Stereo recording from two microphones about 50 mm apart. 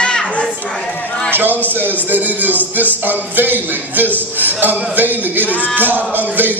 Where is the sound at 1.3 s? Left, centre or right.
Right.